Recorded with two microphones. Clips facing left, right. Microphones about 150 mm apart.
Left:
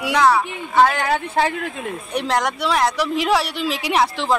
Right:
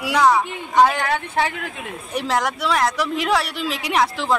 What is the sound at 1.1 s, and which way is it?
Speech, 25° left (ahead or behind).